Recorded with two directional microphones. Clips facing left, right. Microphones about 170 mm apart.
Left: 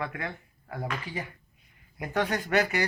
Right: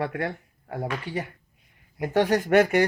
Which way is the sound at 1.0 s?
65° right (ahead or behind).